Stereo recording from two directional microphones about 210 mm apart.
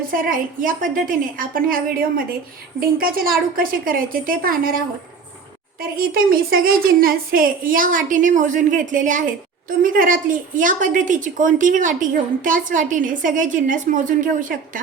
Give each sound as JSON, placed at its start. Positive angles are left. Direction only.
{"t": 0.1, "sound": "a woman's voice", "side_deg": -40}
{"t": 6.0, "sound": "a woman's voice", "side_deg": -45}